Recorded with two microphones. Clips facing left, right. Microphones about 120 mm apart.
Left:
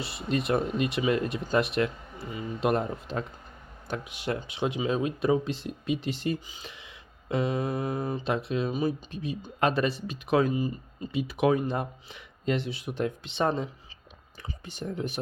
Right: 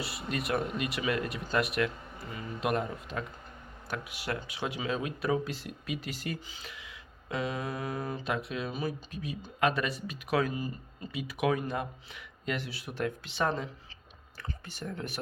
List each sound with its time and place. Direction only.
0.0 s speech: 25° left (ahead or behind)